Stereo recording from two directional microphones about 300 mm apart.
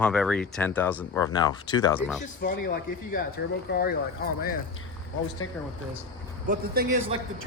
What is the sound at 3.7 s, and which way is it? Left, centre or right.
Speech, left.